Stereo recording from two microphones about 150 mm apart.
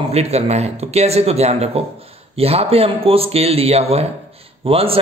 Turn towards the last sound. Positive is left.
turn(degrees=-40)  # may be behind; listen again after turning